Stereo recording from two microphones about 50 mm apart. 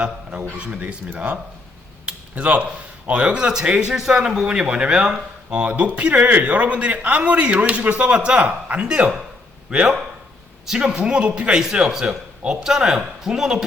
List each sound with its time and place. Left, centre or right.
0.8 s speech: right
8.9 s speech: centre
11.6 s speech: centre